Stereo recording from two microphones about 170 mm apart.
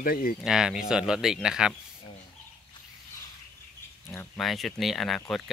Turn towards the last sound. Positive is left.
turn(degrees=0)  # may be behind; listen again after turning